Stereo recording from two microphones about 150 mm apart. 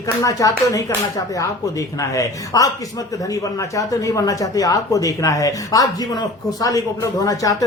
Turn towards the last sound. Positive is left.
turn(degrees=25)  # may be behind; listen again after turning